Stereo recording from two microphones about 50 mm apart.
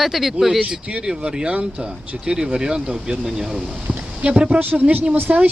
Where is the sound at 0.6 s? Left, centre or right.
Centre.